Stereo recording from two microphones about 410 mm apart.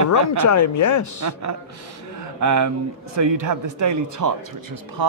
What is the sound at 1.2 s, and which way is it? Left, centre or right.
A man's voice, right.